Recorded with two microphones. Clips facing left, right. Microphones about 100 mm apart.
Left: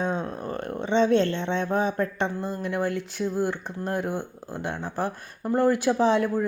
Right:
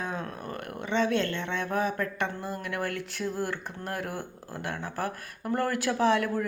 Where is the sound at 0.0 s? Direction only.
25° left (ahead or behind).